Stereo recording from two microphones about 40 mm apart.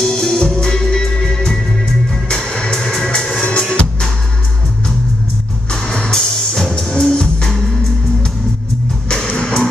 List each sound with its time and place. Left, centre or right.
0.0 s music: centre
5.7 s music: left
9.3 s music: left